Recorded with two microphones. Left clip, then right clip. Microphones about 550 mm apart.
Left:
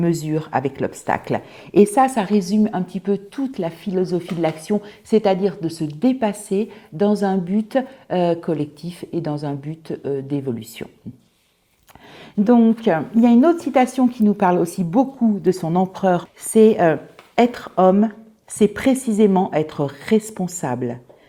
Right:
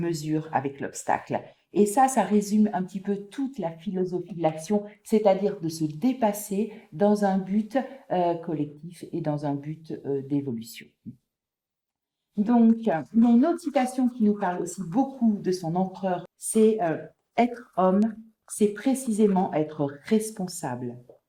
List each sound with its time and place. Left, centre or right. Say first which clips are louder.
0.0 s speech: left 7 dB; left
12.5 s a woman's voice: left 7 dB; left